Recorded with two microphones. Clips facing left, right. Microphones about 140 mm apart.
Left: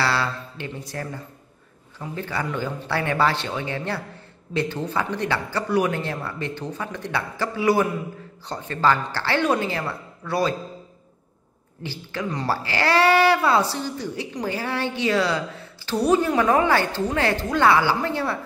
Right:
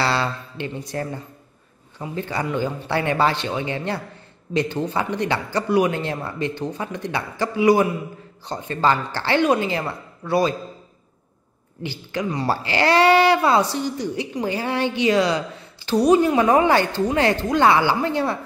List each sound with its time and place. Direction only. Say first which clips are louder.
0.0 s a woman's voice: right 2 dB; 25° right (ahead or behind)
11.8 s a woman's voice: right 3 dB; 15° right (ahead or behind)